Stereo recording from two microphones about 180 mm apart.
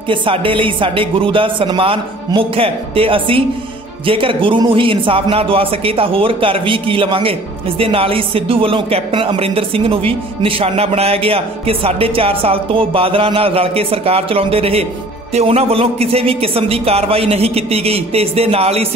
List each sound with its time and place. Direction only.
0.1 s speech: 30° right (ahead or behind)